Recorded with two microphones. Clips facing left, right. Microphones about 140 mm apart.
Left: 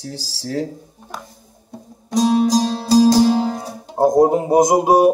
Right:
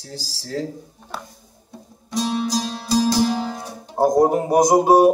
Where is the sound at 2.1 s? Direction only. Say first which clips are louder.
Left 7 dB; 40° left (ahead or behind).